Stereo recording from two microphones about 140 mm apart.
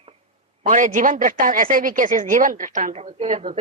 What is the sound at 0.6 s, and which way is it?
A woman's voice, 65° right (ahead or behind).